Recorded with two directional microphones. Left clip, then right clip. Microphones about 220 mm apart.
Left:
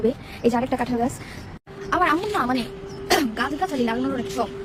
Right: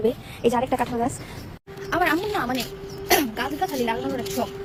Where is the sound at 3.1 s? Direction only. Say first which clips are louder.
Even; 15° left (ahead or behind).